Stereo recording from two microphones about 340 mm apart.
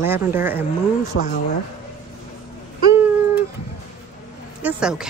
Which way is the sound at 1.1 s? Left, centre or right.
Left.